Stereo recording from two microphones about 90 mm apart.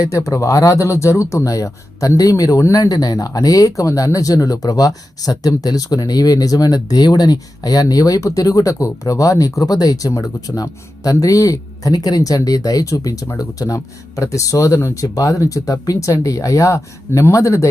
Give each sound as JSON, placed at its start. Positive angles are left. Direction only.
{"t": 0.0, "sound": "speech", "side_deg": 40}